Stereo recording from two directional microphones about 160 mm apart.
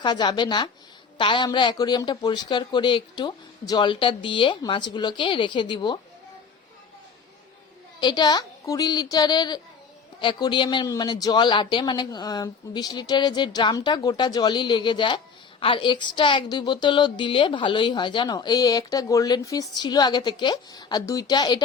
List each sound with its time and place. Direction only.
0.0 s a woman's voice: 30° left (ahead or behind)
8.0 s a woman's voice: 25° left (ahead or behind)